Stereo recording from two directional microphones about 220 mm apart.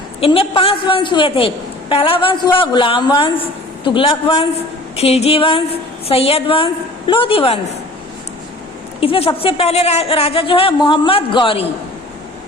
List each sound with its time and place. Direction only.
0.2 s a woman's voice: 25° left (ahead or behind)
9.0 s a woman's voice: 25° left (ahead or behind)